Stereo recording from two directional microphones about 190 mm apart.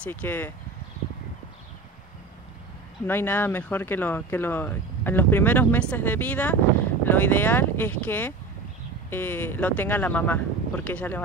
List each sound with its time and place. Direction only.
0.0 s speech: 10° left (ahead or behind)
3.1 s speech: 10° left (ahead or behind)